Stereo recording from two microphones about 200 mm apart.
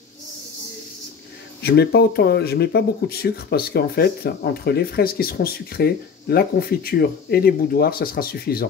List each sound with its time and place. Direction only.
1.6 s speech: 50° left (ahead or behind)